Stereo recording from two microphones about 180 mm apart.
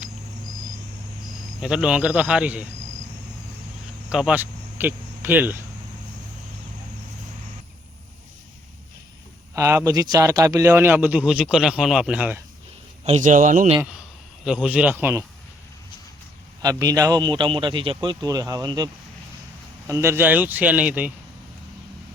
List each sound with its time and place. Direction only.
1.6 s speech: 5° right (ahead or behind)
4.1 s speech: 5° right (ahead or behind)
9.6 s speech: 15° right (ahead or behind)
13.1 s a man's voice: 40° right (ahead or behind)
14.4 s speech: 5° right (ahead or behind)
16.6 s a man's voice: 20° right (ahead or behind)
19.9 s speech: 15° right (ahead or behind)